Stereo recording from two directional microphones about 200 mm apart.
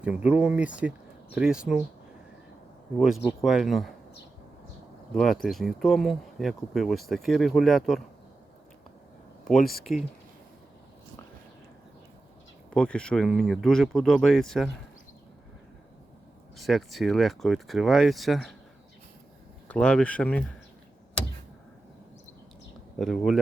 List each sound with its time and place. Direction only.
0.0 s speech: 5° right (ahead or behind)
3.2 s speech: centre (ahead or behind)
5.1 s speech: centre (ahead or behind)
9.6 s speech: 50° left (ahead or behind)
9.8 s speech: centre (ahead or behind)
12.7 s speech: 5° left (ahead or behind)
16.6 s speech: centre (ahead or behind)
19.6 s speech: 5° left (ahead or behind)
23.0 s speech: centre (ahead or behind)